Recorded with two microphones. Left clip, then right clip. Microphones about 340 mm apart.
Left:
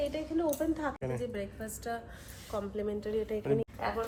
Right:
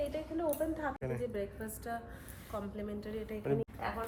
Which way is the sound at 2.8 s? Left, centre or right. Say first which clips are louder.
Left 8 dB; centre.